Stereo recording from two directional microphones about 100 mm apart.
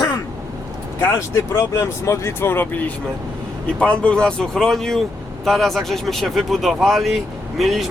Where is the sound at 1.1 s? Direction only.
30° left (ahead or behind).